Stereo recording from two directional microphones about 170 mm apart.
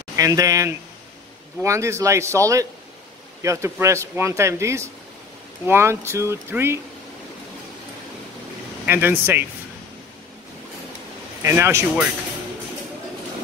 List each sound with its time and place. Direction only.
0.1 s speech: 20° right (ahead or behind)
8.8 s speech: 10° right (ahead or behind)
11.4 s speech: 15° right (ahead or behind)